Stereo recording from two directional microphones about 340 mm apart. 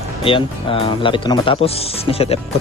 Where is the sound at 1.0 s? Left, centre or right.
Centre.